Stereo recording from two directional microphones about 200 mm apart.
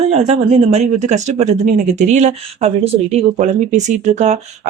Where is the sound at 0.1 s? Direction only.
30° right (ahead or behind).